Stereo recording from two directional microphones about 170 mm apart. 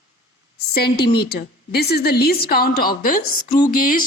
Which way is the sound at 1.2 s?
70° left (ahead or behind).